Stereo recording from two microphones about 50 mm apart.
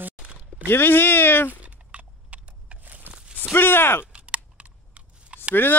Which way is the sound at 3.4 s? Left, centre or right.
Left.